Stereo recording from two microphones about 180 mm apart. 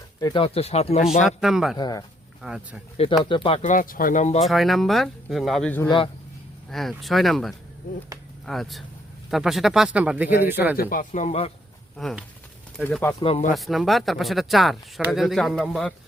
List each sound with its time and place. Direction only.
0.2 s speech: 25° left (ahead or behind)
1.4 s speech: centre (ahead or behind)
1.8 s speech: 20° left (ahead or behind)
2.4 s speech: 5° right (ahead or behind)
3.2 s speech: 30° left (ahead or behind)
3.6 s speech: 45° left (ahead or behind)
4.4 s speech: centre (ahead or behind)
10.8 s speech: 50° left (ahead or behind)
11.9 s speech: centre (ahead or behind)
13.2 s speech: 35° left (ahead or behind)
13.5 s speech: centre (ahead or behind)